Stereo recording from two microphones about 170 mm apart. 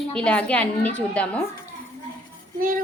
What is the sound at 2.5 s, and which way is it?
Child singing, 55° right (ahead or behind).